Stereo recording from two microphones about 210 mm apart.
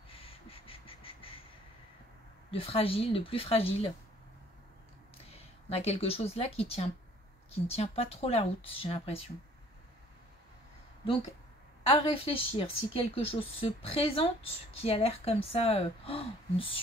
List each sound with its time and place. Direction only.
0.1 s crow: 25° left (ahead or behind)
2.5 s a woman's voice: 25° left (ahead or behind)
5.3 s a woman's voice: 30° left (ahead or behind)
11.9 s a woman's voice: 25° left (ahead or behind)